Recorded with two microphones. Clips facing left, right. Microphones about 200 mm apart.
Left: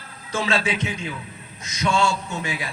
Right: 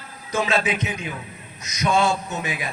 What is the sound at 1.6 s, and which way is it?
Speech, 20° right (ahead or behind).